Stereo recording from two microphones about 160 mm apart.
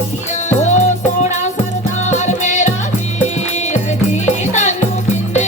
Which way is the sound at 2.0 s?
50° left (ahead or behind).